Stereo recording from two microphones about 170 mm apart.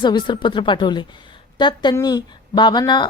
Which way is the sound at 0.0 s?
25° left (ahead or behind).